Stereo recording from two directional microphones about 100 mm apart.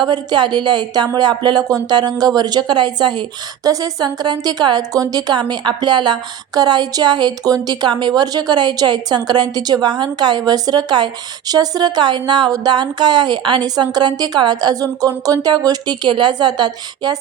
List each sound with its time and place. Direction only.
0.0 s speech: 45° right (ahead or behind)